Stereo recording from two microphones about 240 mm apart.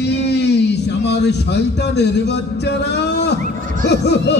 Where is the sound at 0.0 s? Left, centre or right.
Left.